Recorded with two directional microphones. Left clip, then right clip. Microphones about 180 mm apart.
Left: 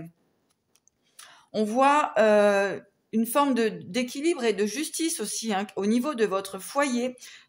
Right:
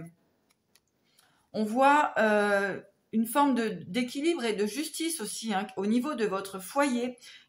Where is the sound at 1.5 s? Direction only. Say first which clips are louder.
Left 2 dB; 40° left (ahead or behind).